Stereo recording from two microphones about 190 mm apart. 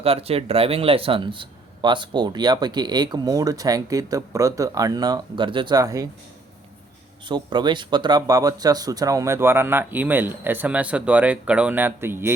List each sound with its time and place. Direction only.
0.0 s a man's voice: 30° right (ahead or behind)
7.3 s speech: 25° right (ahead or behind)